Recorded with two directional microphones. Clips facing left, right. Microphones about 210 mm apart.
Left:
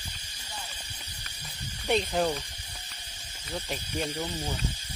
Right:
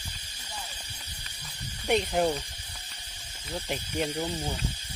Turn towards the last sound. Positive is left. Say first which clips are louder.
# right 2 dB
turn(degrees=-15)  # may be behind; listen again after turning